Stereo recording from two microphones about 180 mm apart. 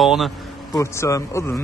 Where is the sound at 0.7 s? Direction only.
20° left (ahead or behind).